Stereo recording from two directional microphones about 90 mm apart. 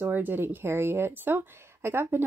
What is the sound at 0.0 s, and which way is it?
Speech, 20° right (ahead or behind).